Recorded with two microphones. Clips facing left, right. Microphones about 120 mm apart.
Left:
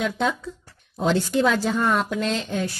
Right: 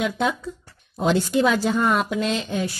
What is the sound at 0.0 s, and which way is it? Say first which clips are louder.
A woman's voice: right 1 dB; 10° right (ahead or behind).